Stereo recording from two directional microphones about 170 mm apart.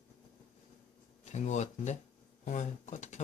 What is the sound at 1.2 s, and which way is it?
Speech, 45° left (ahead or behind).